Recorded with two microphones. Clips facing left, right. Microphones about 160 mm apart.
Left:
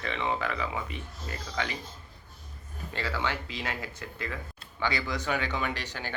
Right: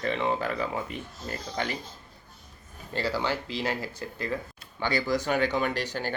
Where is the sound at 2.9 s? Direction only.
35° right (ahead or behind).